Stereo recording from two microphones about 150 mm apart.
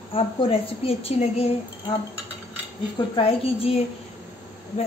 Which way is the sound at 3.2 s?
40° left (ahead or behind).